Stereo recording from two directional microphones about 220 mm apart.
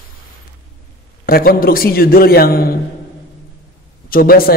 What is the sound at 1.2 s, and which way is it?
A man's voice, 45° left (ahead or behind).